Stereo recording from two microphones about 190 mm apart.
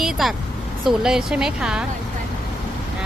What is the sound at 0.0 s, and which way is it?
Speech, centre (ahead or behind).